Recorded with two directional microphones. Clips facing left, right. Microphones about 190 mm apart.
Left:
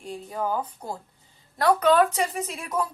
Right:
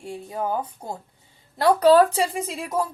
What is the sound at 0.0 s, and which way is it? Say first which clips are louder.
A woman's voice: right 1 dB; 25° right (ahead or behind).